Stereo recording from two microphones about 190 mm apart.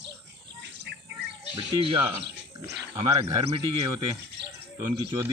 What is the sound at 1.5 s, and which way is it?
Speech, 25° right (ahead or behind).